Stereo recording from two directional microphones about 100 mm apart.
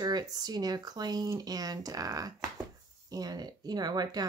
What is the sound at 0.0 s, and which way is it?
Speech, 45° right (ahead or behind).